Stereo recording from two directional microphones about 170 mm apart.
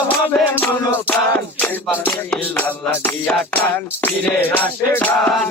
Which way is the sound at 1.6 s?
5° left (ahead or behind).